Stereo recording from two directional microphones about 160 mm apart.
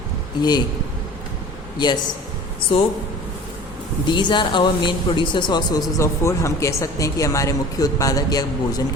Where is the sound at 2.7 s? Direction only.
35° left (ahead or behind).